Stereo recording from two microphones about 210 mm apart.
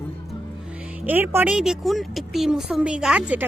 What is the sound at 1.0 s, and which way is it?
Speech, 10° right (ahead or behind).